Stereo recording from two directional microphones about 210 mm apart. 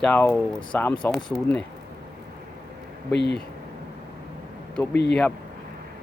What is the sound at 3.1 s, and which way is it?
Speech, 55° left (ahead or behind).